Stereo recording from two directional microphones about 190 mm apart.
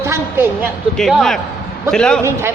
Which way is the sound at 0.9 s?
Centre (ahead or behind).